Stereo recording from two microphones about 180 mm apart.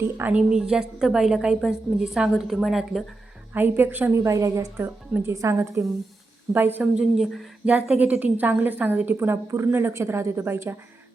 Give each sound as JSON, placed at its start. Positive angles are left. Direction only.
{"t": 0.2, "sound": "a woman's voice", "side_deg": -5}